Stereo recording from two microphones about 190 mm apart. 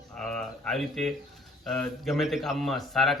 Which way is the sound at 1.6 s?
Centre (ahead or behind).